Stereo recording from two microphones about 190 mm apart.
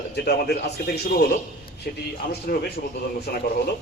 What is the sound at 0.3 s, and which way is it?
Speech, 55° left (ahead or behind).